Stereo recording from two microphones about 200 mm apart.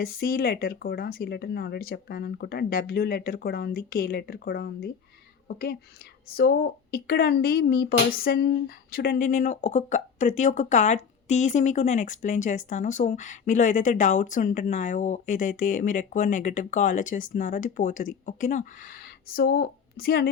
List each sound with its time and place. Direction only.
0.0 s a woman's voice: 50° left (ahead or behind)